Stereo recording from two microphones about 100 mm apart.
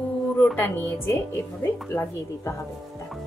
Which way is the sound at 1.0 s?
25° left (ahead or behind).